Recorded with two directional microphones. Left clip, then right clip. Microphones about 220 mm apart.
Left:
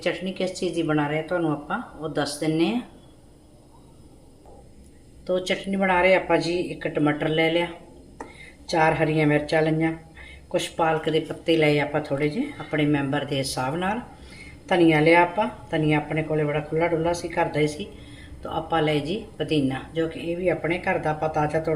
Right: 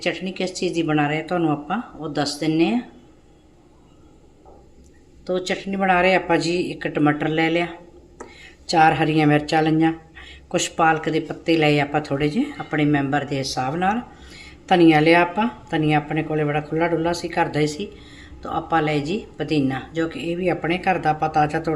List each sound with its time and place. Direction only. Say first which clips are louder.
0.0 s speech: right 2 dB; 20° right (ahead or behind)
5.2 s speech: right 1 dB; 20° right (ahead or behind)